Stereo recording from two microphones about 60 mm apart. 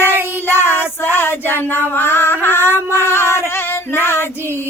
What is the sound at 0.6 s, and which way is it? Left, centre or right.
Music, right.